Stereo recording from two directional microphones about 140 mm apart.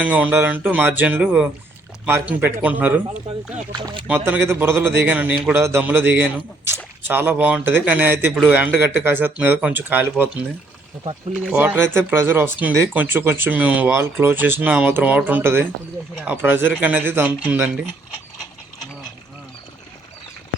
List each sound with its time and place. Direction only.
0.0 s speech: 10° right (ahead or behind)
3.7 s speech: 35° right (ahead or behind)
4.3 s speech: 15° right (ahead or behind)
11.3 s speech: 10° right (ahead or behind)